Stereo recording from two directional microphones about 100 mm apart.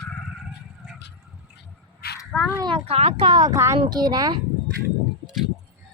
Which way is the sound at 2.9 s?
80° right.